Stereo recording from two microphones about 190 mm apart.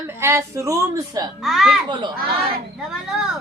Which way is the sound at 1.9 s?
25° right (ahead or behind).